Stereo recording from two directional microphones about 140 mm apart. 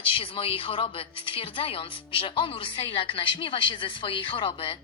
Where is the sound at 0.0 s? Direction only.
40° left (ahead or behind).